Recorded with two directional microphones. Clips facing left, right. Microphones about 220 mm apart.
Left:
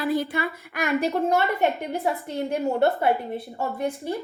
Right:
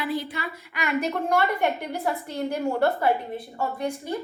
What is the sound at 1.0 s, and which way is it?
A woman's voice, 25° left (ahead or behind).